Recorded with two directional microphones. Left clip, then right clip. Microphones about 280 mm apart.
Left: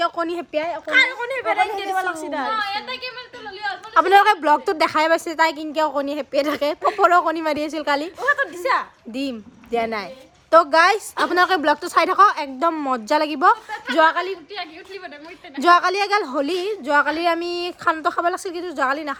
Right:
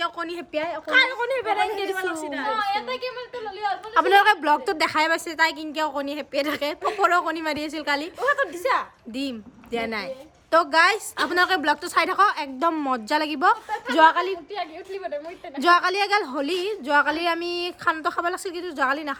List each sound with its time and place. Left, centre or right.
0.0 s speech: centre
0.9 s speech: centre
1.9 s a woman's voice: centre
2.5 s speech: right
3.9 s a woman's voice: centre
14.5 s a woman's voice: right
15.6 s a woman's voice: centre